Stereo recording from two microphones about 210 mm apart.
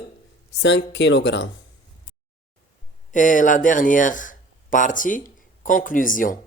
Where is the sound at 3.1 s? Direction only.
40° left (ahead or behind).